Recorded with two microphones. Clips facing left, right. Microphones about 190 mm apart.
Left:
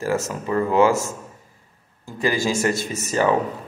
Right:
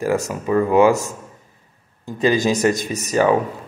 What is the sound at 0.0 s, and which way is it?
Speech, 15° right (ahead or behind).